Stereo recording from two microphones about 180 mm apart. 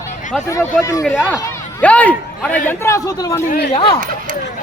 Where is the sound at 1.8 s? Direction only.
10° left (ahead or behind).